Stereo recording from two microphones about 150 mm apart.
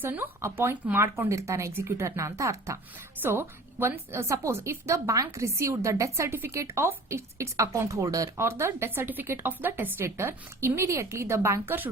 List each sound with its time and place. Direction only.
0.0 s a woman's voice: 15° right (ahead or behind)